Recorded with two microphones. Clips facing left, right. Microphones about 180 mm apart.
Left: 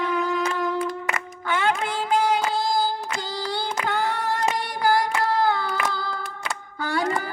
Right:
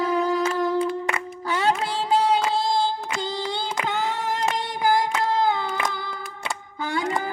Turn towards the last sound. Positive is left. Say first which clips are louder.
# left 1 dB
turn(degrees=-20)  # may be behind; listen again after turning